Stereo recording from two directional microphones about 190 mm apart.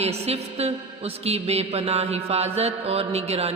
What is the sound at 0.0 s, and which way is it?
Mantra, 35° right (ahead or behind).